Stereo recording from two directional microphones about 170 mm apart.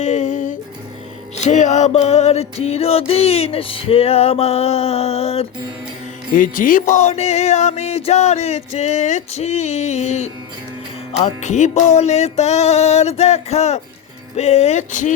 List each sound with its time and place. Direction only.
0.0 s music: 45° left (ahead or behind)
6.3 s music: 50° left (ahead or behind)